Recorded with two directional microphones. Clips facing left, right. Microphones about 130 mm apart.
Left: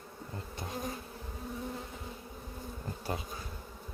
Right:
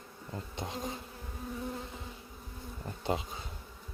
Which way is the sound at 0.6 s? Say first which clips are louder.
Right 2 dB; 25° right (ahead or behind).